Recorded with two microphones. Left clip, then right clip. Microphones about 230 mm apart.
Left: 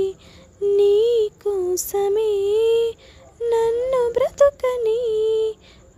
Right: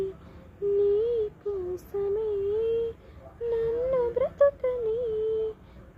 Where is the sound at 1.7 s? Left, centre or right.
Left.